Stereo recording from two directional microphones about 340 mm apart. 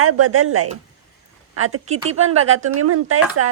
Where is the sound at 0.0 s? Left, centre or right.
Right.